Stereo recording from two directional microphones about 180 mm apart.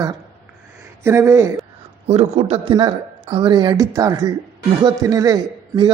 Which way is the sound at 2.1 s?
35° right (ahead or behind).